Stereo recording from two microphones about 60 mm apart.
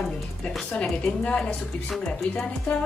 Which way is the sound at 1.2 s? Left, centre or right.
Centre.